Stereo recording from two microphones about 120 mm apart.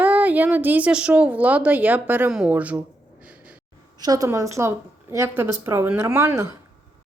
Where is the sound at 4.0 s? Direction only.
30° right (ahead or behind).